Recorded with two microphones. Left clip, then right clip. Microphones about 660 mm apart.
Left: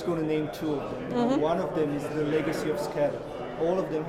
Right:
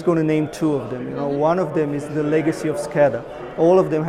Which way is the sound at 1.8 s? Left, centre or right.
Right.